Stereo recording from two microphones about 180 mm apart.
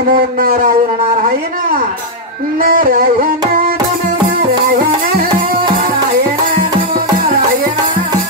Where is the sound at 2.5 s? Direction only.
55° right (ahead or behind).